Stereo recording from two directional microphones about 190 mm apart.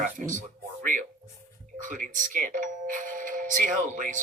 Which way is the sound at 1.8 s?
45° right (ahead or behind).